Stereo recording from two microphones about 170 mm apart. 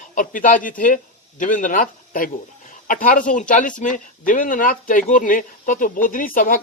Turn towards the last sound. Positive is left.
turn(degrees=55)  # may be behind; listen again after turning